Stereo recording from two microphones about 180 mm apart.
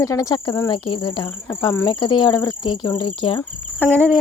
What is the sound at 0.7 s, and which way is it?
Speech, 30° left (ahead or behind).